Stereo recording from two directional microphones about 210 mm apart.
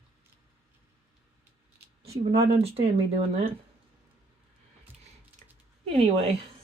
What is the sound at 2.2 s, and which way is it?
Speech, 35° right (ahead or behind).